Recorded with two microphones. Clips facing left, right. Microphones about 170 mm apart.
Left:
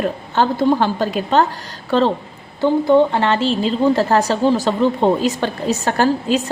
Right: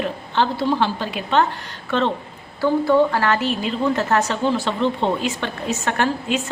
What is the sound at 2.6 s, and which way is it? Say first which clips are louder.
A woman's voice: left 3 dB; 20° left (ahead or behind).